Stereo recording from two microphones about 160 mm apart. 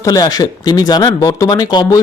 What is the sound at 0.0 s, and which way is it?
Speech, 25° left (ahead or behind).